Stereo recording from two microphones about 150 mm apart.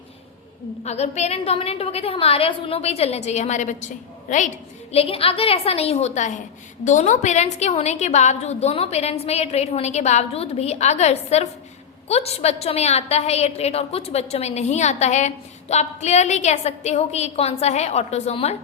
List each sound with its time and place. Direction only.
0.9 s a woman's voice: 50° left (ahead or behind)